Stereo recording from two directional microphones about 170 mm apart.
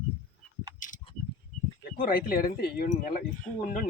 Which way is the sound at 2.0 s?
60° left (ahead or behind).